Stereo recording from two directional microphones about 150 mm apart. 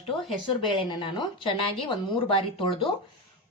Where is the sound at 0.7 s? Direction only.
30° left (ahead or behind).